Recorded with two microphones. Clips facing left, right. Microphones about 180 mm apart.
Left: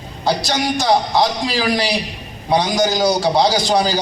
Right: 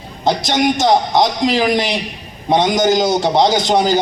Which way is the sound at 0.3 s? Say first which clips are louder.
Right 4 dB; 20° right (ahead or behind).